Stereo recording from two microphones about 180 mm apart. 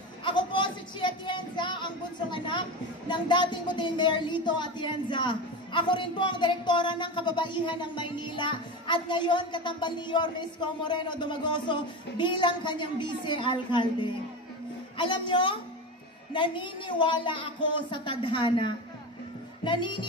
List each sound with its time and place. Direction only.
0.2 s speech: 25° left (ahead or behind)